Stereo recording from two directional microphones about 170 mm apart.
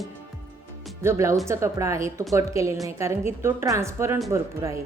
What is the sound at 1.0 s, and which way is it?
A woman's voice, 15° right (ahead or behind).